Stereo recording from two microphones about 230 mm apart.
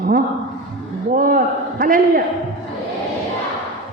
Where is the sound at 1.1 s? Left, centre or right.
Right.